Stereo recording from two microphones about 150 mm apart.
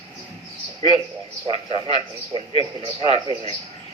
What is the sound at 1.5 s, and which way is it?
A man's voice, 35° right (ahead or behind).